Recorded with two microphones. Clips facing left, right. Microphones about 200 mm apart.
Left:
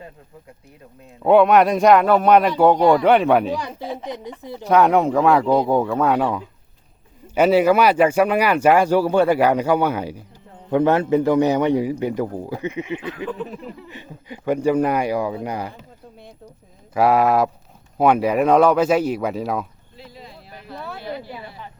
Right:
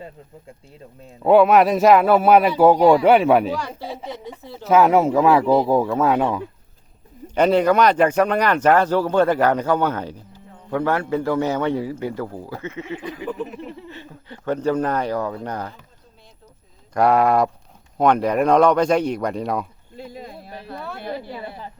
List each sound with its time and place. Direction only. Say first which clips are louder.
1.2 s a man's voice: even; centre (ahead or behind)
4.0 s speech: left 2 dB; 15° left (ahead or behind)
4.7 s a man's voice: right 1 dB; 5° right (ahead or behind)
10.7 s speech: left 5 dB; 20° left (ahead or behind)
16.9 s a man's voice: even; 5° left (ahead or behind)
20.0 s speech: right 6 dB; 50° right (ahead or behind)
20.7 s a man's voice: left 1 dB; centre (ahead or behind)